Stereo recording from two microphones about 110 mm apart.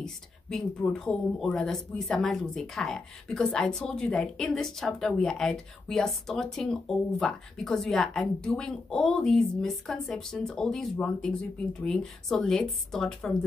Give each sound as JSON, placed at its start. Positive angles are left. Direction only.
{"t": 0.0, "sound": "speech", "side_deg": 5}